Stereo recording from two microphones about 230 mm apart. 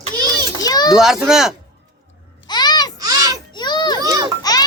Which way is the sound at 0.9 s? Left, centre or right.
Centre.